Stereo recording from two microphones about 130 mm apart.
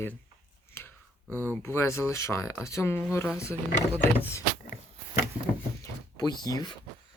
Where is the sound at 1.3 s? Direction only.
15° left (ahead or behind).